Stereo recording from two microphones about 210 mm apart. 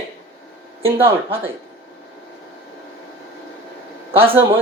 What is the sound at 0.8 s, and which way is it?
Speech, 10° right (ahead or behind).